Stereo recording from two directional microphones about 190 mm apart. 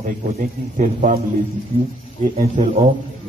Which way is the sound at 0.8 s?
40° right (ahead or behind).